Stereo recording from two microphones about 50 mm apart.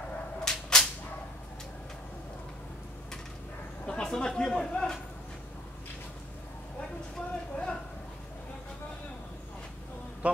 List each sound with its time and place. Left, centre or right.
0.5 s dog: centre
3.8 s speech: centre
7.2 s speech: centre
10.2 s mantra: right